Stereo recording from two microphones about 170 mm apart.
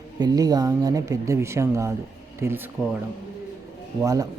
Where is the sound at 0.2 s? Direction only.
20° right (ahead or behind).